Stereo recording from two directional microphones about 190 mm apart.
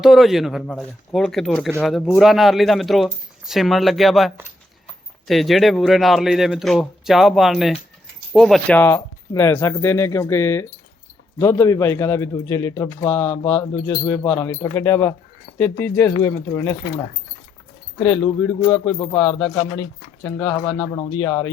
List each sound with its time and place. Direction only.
0.0 s speech: centre (ahead or behind)
5.3 s speech: centre (ahead or behind)
15.5 s a sound: 60° left (ahead or behind)
15.8 s speech: 10° left (ahead or behind)
18.9 s speech: 20° left (ahead or behind)
20.2 s speech: 15° left (ahead or behind)